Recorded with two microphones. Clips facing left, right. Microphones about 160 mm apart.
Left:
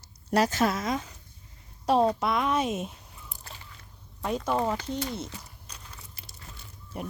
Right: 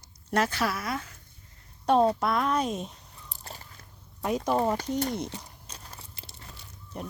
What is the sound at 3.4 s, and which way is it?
Biting, 40° right (ahead or behind).